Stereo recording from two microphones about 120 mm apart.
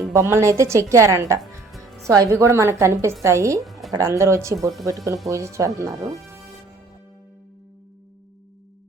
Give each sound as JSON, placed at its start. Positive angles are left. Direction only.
{"t": 0.1, "sound": "a woman's voice", "side_deg": -25}
{"t": 3.6, "sound": "music", "side_deg": 0}
{"t": 4.0, "sound": "a woman's voice", "side_deg": -25}